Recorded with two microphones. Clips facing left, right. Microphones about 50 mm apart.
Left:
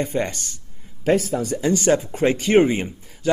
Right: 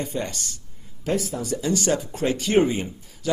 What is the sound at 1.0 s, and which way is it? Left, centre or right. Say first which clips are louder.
Speech: left 6 dB; left.